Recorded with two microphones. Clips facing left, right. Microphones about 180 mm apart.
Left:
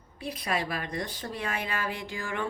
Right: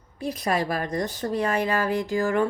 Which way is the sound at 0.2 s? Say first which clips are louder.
Right 6 dB; 45° right (ahead or behind).